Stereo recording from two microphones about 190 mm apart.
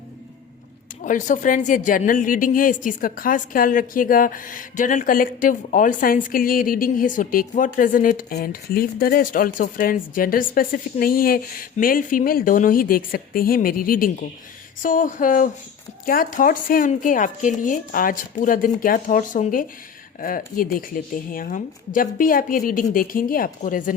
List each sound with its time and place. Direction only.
1.0 s speech: 40° left (ahead or behind)